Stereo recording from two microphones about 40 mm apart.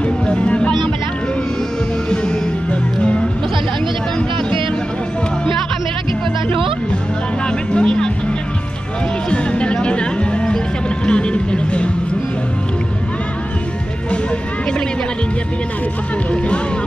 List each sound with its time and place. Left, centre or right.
0.0 s music: left
2.0 s music: left
7.4 s music: left
9.3 s music: left